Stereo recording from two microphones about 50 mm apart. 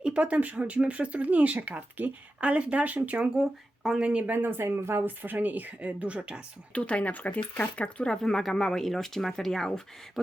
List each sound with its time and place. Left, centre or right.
0.0 s speech: right
3.4 s speech: centre
4.2 s speech: right
5.0 s speech: right
6.1 s speech: centre
6.7 s speech: left
8.0 s speech: centre